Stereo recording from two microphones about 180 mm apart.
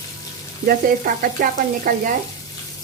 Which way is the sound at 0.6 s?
55° right (ahead or behind).